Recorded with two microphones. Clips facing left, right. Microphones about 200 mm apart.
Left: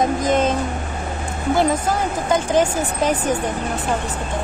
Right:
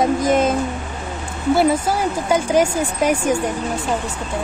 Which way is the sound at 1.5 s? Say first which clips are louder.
Right 2 dB; 10° right (ahead or behind).